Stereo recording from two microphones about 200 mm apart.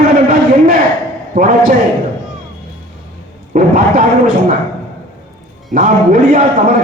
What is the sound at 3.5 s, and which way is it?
Speech, 45° right (ahead or behind).